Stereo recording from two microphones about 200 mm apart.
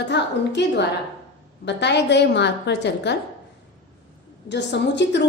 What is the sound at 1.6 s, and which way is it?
A woman's voice, 60° left (ahead or behind).